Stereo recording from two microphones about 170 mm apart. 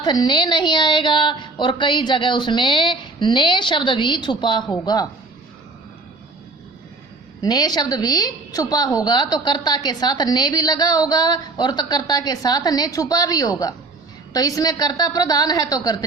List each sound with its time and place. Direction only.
0.0 s a woman's voice: 25° left (ahead or behind)
7.4 s a woman's voice: 25° left (ahead or behind)